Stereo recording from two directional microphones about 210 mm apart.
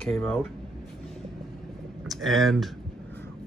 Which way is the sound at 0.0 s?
5° left (ahead or behind).